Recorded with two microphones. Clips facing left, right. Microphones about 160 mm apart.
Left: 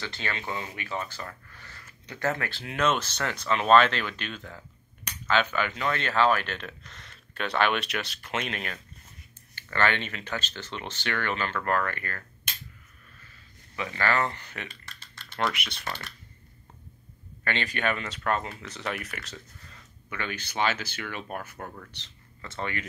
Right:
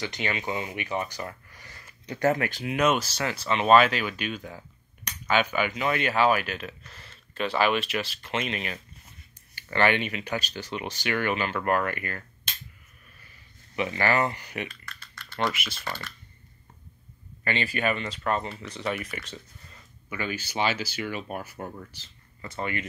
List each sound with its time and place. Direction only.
0.0 s speech: 15° right (ahead or behind)
9.6 s speech: 15° right (ahead or behind)
13.7 s speech: 15° right (ahead or behind)
14.7 s typing: 25° left (ahead or behind)
15.3 s speech: centre (ahead or behind)
17.5 s speech: 10° right (ahead or behind)
21.9 s a sound: 5° right (ahead or behind)
22.6 s speech: 5° right (ahead or behind)